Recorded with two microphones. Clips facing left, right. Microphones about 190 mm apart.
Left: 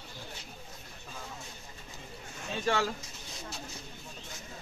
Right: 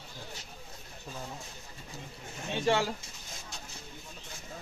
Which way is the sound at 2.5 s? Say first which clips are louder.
Right 2 dB; 25° right (ahead or behind).